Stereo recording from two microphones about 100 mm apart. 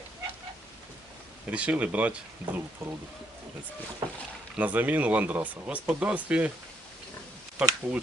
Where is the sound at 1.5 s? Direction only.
15° right (ahead or behind).